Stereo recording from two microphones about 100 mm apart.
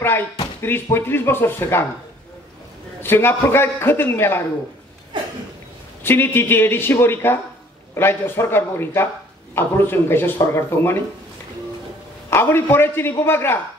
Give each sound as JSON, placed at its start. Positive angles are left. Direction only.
{"t": 0.6, "sound": "a man's voice", "side_deg": 20}
{"t": 3.0, "sound": "a man's voice", "side_deg": 20}
{"t": 6.0, "sound": "a man's voice", "side_deg": 20}
{"t": 12.3, "sound": "a man's voice", "side_deg": 25}